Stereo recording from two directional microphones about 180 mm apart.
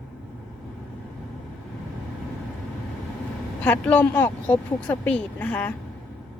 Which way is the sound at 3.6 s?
10° left (ahead or behind).